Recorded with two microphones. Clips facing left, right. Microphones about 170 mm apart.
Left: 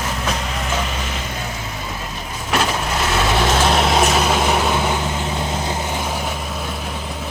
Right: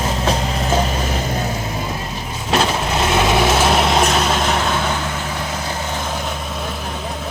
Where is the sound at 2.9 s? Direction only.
20° right (ahead or behind).